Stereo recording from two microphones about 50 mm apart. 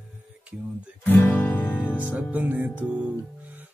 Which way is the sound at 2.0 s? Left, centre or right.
Right.